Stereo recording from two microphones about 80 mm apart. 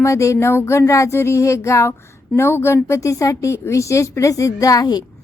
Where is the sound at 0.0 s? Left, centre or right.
Left.